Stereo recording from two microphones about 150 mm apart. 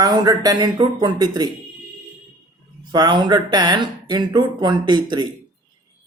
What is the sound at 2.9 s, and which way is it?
A man's voice, 30° right (ahead or behind).